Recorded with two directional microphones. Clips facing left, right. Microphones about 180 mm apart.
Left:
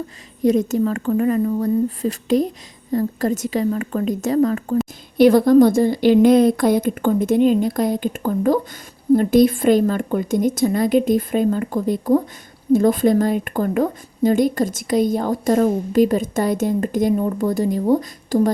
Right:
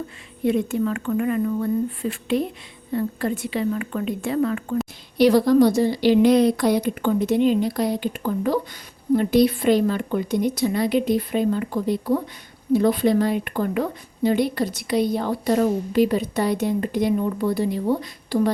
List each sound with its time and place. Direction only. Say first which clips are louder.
0.4 s speech: left 4 dB; 40° left (ahead or behind)
5.1 s a woman's voice: left 4 dB; 50° left (ahead or behind)